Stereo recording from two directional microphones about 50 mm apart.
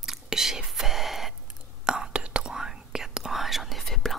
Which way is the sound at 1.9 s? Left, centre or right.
Centre.